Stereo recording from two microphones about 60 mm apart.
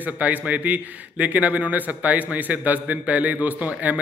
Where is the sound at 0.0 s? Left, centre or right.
Right.